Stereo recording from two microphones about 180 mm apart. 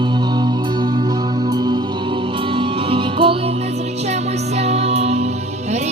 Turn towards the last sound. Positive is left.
turn(degrees=-35)  # may be behind; listen again after turning